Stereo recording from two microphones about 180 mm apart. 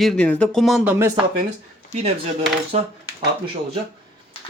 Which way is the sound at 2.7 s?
35° right (ahead or behind).